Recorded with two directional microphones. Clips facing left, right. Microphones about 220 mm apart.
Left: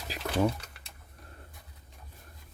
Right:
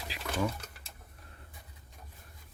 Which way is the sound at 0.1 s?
45° left (ahead or behind).